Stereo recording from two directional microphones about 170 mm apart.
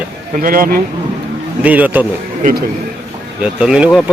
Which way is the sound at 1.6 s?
10° right (ahead or behind).